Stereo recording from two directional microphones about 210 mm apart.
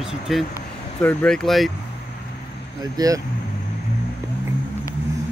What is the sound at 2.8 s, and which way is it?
Speech, 15° right (ahead or behind).